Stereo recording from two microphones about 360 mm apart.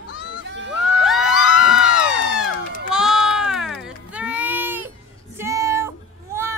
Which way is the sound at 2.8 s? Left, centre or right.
Centre.